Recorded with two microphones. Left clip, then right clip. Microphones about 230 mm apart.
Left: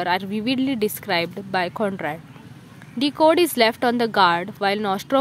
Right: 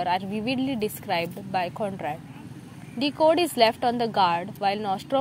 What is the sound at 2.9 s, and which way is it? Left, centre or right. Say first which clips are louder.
Speech: left 4 dB; left.